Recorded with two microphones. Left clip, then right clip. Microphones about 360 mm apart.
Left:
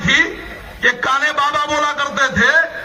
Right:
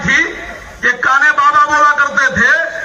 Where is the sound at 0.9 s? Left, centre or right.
Centre.